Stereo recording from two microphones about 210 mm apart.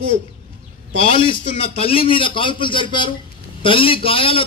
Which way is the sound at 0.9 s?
25° left (ahead or behind).